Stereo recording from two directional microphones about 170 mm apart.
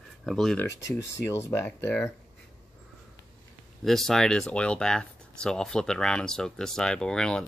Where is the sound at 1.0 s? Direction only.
15° left (ahead or behind).